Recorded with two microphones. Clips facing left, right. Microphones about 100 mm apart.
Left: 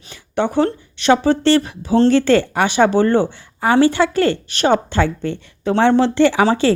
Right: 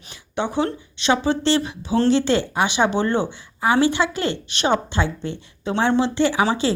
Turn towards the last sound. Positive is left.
turn(degrees=55)  # may be behind; listen again after turning